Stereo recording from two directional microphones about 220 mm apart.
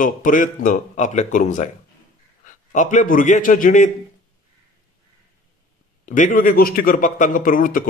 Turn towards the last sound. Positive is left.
turn(degrees=40)  # may be behind; listen again after turning